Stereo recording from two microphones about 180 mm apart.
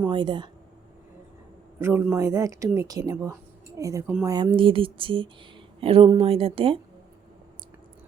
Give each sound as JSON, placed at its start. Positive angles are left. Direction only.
{"t": 0.1, "sound": "speech", "side_deg": -25}
{"t": 1.8, "sound": "speech", "side_deg": -10}